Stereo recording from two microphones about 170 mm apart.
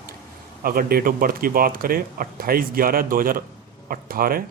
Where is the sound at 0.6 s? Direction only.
60° right (ahead or behind).